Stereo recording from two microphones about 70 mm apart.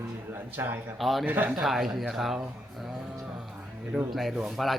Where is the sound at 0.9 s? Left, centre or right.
Centre.